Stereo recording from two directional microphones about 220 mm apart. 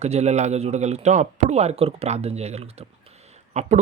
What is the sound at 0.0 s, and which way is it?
Speech, 30° right (ahead or behind).